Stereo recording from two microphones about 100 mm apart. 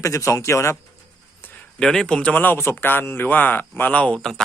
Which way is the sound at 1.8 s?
5° left (ahead or behind).